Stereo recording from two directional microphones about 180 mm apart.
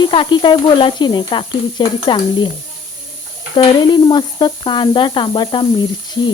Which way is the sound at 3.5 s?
25° left (ahead or behind).